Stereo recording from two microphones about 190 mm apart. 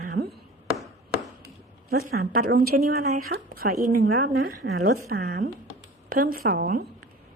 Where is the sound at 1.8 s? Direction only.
55° right (ahead or behind).